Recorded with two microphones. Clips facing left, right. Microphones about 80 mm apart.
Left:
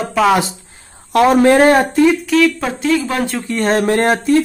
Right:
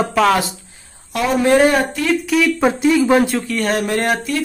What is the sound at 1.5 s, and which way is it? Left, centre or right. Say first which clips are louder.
Speech: left 3 dB; left.